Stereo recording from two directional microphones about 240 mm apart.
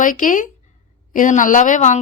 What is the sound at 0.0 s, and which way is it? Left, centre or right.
Speech, left.